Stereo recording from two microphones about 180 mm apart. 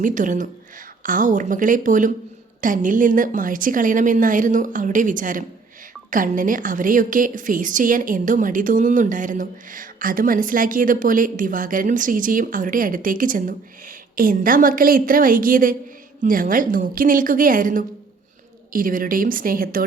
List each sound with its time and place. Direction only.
0.0 s a woman's voice: 45° right (ahead or behind)